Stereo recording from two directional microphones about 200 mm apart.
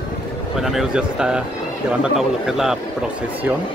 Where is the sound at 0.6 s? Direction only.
Centre (ahead or behind).